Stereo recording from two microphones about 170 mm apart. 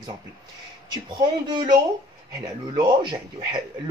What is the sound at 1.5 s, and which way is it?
Speech, 25° right (ahead or behind).